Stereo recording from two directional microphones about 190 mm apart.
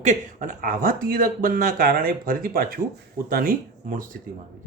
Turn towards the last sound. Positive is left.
turn(degrees=-50)  # may be behind; listen again after turning